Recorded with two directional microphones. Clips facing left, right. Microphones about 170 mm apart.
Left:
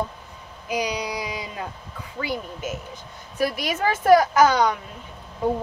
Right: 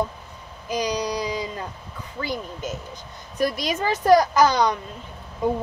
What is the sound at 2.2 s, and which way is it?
Speech, 10° left (ahead or behind).